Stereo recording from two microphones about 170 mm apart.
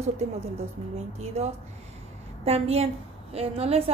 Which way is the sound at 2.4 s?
35° right (ahead or behind).